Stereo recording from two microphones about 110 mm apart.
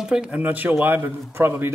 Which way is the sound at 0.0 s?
5° right (ahead or behind).